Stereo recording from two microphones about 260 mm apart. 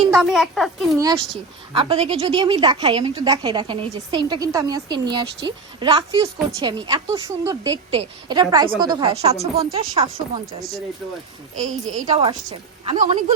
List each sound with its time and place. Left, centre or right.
0.1 s speech: centre
0.9 s a woman's voice: centre
11.5 s a woman's voice: right
12.0 s a woman's voice: centre